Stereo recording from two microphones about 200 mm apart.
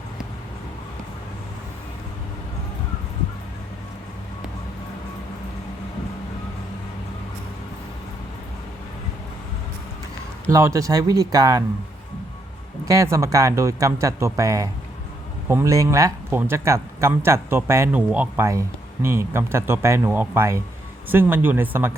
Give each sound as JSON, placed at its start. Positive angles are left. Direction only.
{"t": 10.5, "sound": "speech", "side_deg": -15}
{"t": 12.8, "sound": "speech", "side_deg": -15}